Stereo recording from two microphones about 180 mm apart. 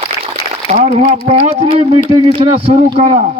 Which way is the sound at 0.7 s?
40° right (ahead or behind).